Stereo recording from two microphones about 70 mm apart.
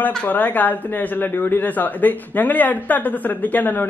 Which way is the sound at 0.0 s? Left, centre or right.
Left.